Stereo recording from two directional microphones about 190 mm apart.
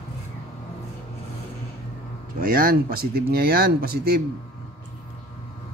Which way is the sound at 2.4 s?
50° right (ahead or behind).